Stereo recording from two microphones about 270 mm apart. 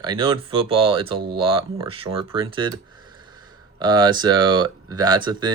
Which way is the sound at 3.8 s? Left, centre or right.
Centre.